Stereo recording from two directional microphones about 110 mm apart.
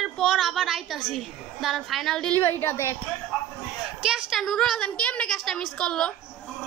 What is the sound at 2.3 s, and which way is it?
Speech, 20° left (ahead or behind).